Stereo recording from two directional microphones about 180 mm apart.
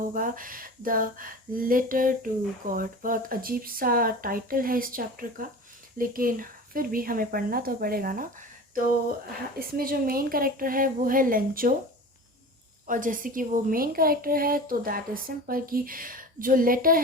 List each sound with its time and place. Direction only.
0.1 s speech: 50° right (ahead or behind)
12.9 s speech: 50° right (ahead or behind)